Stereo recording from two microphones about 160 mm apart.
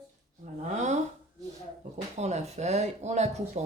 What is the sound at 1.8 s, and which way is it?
Speech, 45° right (ahead or behind).